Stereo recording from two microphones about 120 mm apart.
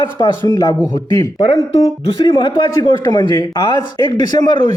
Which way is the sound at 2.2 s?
40° left (ahead or behind).